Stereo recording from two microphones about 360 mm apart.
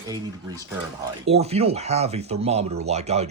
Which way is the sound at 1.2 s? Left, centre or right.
Centre.